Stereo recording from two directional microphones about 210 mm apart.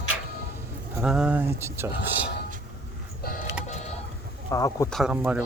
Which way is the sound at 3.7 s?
35° left (ahead or behind).